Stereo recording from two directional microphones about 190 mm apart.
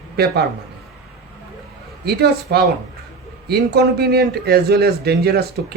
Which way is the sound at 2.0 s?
55° right (ahead or behind).